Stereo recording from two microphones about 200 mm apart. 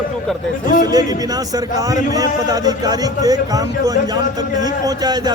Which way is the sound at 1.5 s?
20° right (ahead or behind).